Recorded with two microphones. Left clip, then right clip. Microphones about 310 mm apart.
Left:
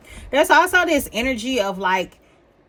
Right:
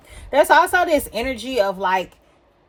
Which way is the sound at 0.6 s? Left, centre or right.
Centre.